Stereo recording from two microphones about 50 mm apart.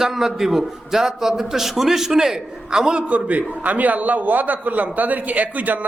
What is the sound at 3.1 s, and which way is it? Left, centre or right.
A man's voice, right.